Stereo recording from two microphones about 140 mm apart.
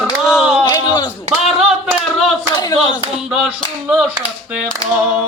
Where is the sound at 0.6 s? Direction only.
25° left (ahead or behind).